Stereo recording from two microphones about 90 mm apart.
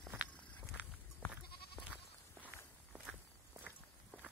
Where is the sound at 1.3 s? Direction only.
15° right (ahead or behind).